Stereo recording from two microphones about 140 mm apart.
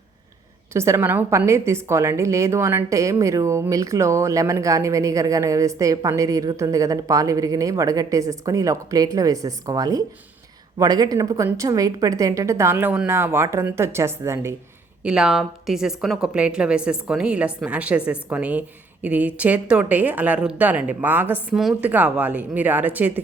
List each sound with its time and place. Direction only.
0.7 s a woman's voice: 20° right (ahead or behind)
15.0 s a woman's voice: 5° right (ahead or behind)